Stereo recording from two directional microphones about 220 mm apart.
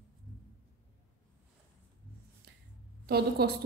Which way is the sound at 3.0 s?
45° right (ahead or behind).